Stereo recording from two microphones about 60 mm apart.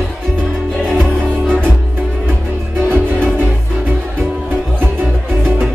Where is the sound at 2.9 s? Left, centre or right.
Right.